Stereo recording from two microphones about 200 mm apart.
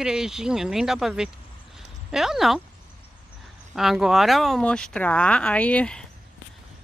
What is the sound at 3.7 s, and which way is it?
Speech, centre (ahead or behind).